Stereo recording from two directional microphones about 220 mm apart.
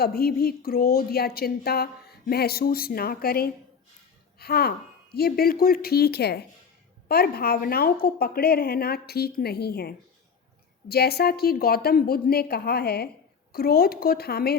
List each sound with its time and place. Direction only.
0.0 s a woman's voice: 45° left (ahead or behind)